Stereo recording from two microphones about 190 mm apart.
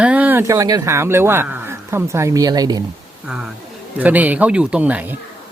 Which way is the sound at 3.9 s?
10° right (ahead or behind).